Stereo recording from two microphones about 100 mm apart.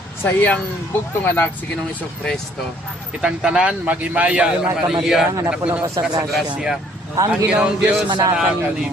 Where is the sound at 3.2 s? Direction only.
10° right (ahead or behind).